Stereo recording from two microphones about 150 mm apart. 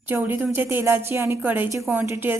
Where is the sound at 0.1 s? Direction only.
15° right (ahead or behind).